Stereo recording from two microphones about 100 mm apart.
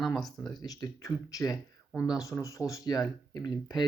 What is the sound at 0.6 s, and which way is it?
Speech, 35° left (ahead or behind).